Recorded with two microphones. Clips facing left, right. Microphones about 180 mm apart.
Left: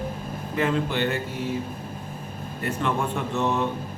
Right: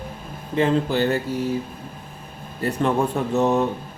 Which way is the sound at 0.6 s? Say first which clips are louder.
Right 5 dB; 35° right (ahead or behind).